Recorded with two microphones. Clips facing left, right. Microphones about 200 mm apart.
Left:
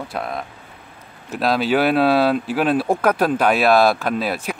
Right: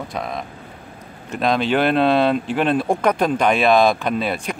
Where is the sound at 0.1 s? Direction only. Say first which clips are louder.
Even; 5° left (ahead or behind).